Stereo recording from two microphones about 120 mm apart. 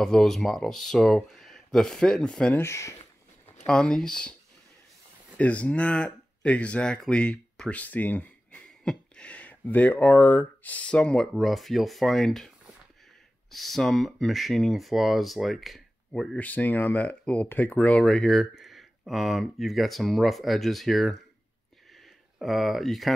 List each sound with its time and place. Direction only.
0.0 s speech: 5° left (ahead or behind)
2.5 s speech: 20° left (ahead or behind)
3.6 s speech: 5° left (ahead or behind)
5.4 s speech: 10° left (ahead or behind)
16.3 s speech: 15° left (ahead or behind)
22.4 s speech: centre (ahead or behind)